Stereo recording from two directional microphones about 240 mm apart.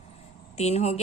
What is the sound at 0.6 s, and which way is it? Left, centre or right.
Speech, left.